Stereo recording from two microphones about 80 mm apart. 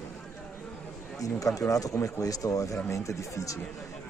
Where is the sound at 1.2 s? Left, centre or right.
Left.